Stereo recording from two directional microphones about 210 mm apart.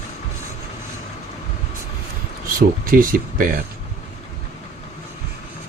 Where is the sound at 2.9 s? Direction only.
40° right (ahead or behind).